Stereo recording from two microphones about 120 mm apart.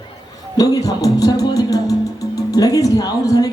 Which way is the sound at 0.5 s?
30° left (ahead or behind).